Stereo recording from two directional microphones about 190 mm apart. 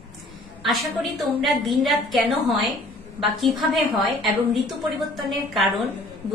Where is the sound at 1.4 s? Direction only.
Centre (ahead or behind).